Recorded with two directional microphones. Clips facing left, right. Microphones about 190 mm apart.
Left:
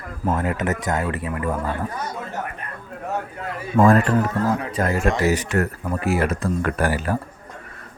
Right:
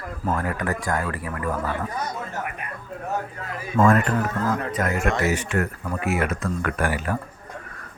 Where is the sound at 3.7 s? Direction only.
35° left (ahead or behind).